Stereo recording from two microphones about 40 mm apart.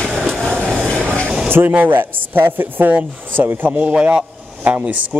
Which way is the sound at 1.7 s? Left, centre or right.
Right.